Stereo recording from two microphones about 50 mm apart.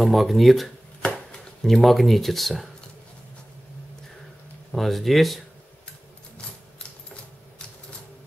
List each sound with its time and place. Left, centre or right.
0.0 s speech: centre
1.0 s chopping: left
1.6 s speech: centre
4.7 s speech: centre